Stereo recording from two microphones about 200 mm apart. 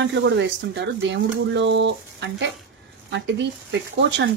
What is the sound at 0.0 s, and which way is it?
Speech, 65° right (ahead or behind).